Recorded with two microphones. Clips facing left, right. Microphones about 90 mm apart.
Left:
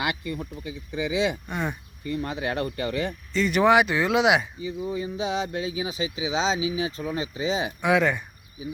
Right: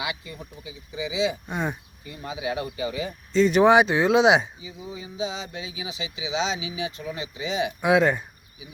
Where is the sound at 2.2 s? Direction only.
60° left (ahead or behind).